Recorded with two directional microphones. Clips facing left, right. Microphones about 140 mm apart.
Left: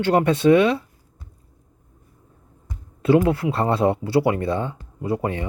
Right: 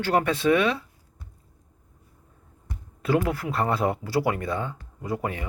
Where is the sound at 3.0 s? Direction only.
25° left (ahead or behind).